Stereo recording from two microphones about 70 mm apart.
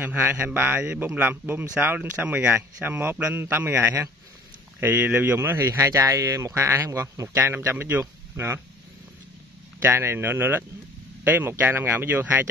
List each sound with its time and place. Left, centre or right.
0.0 s speech: right
5.9 s speech: right
7.3 s speech: right
9.8 s speech: right